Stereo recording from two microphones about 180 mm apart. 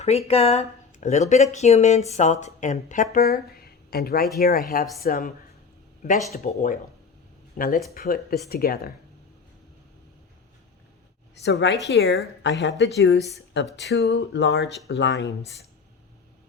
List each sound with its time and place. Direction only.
0.0 s speech: 35° left (ahead or behind); by 5.3 s 50° left (ahead or behind)
6.3 s speech: 50° left (ahead or behind)
11.4 s a woman's voice: 80° left
11.9 s speech: 65° left (ahead or behind)
12.4 s a woman's voice: 80° left